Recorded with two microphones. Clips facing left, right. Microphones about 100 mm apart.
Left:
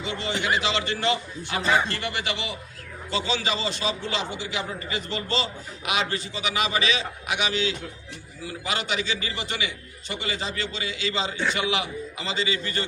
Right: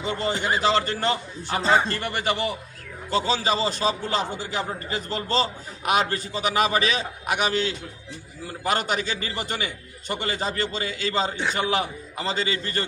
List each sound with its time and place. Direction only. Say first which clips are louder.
0.0 s a man's voice: right 3 dB; 40° right (ahead or behind)